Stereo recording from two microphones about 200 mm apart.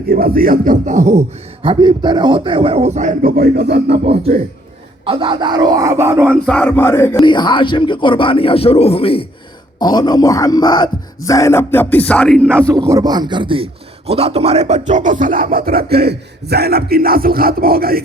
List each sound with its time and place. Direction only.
0.1 s speech: 50° right (ahead or behind)
1.6 s a man's voice: 25° right (ahead or behind); by 4.0 s 55° right (ahead or behind)
4.0 s speech: 30° right (ahead or behind); by 6.4 s 10° right (ahead or behind)
6.4 s speech: 5° left (ahead or behind)
7.2 s speech: 25° left (ahead or behind); by 12.6 s 5° left (ahead or behind)
12.6 s a man's voice: 15° right (ahead or behind); by 18.0 s 50° right (ahead or behind)